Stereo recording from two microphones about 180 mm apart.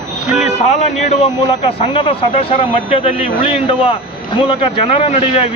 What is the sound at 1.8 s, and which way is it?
Speech, 35° left (ahead or behind).